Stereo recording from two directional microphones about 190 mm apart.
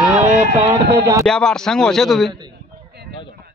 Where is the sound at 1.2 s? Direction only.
5° left (ahead or behind).